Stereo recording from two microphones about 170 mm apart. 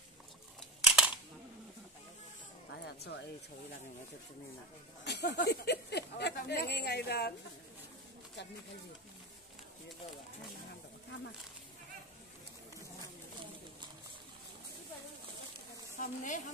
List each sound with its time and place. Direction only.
0.6 s camera: 5° right (ahead or behind)
2.7 s music: 80° left
5.0 s speech: 80° left
8.4 s speech: 90° left
16.0 s a woman's voice: 50° left (ahead or behind)